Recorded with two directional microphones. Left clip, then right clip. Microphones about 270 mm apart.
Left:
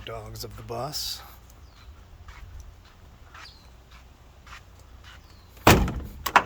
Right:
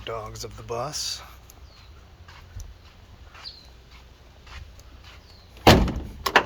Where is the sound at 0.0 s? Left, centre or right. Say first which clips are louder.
Right 4 dB; centre.